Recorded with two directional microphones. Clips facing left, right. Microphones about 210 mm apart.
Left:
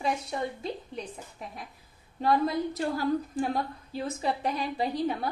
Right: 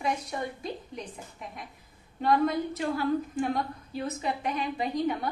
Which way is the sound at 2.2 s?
35° left (ahead or behind).